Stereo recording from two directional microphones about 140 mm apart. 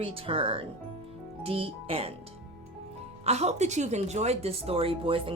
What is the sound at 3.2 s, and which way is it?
Speech, 50° right (ahead or behind).